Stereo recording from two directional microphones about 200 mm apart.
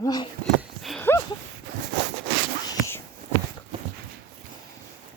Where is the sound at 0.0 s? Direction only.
20° left (ahead or behind).